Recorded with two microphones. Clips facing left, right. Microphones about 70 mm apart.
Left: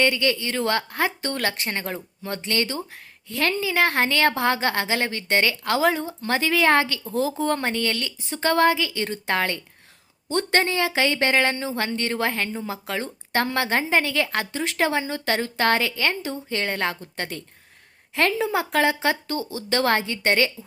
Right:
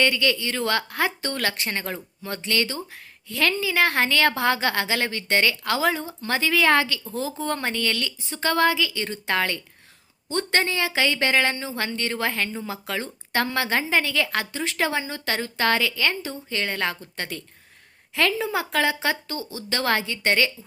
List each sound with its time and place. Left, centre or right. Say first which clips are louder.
0.0 s a woman's voice: left 1 dB; left
7.1 s a woman's voice: left 4 dB; left
8.2 s a woman's voice: left 2 dB; left